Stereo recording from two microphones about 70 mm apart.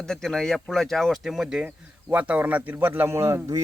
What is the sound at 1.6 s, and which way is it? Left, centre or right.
A man's voice, right.